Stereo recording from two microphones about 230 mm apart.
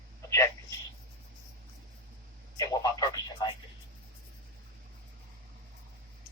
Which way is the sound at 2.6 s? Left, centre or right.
Centre.